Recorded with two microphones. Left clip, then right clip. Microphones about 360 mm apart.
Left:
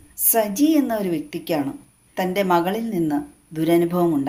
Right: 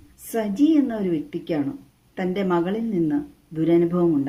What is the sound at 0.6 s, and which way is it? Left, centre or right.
Speech, centre.